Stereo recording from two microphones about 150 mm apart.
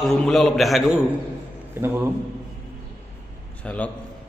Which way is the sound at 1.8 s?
15° right (ahead or behind).